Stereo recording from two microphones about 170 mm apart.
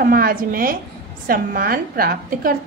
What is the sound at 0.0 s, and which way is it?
A woman's voice, 60° right (ahead or behind).